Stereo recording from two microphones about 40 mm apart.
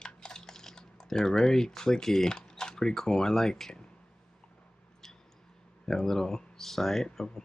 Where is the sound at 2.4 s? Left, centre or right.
Centre.